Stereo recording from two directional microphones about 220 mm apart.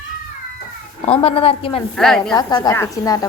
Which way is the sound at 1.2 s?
25° left (ahead or behind).